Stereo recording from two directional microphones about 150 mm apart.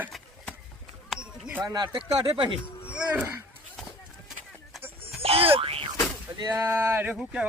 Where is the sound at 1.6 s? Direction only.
30° right (ahead or behind).